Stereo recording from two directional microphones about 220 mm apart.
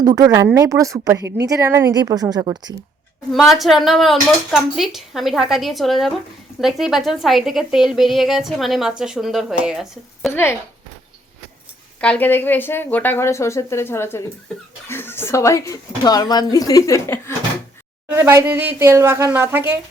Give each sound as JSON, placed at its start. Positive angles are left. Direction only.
{"t": 0.0, "sound": "speech", "side_deg": -15}
{"t": 3.3, "sound": "a woman's voice", "side_deg": 0}
{"t": 10.3, "sound": "speech", "side_deg": 10}
{"t": 11.9, "sound": "speech", "side_deg": 5}
{"t": 18.1, "sound": "speech", "side_deg": -10}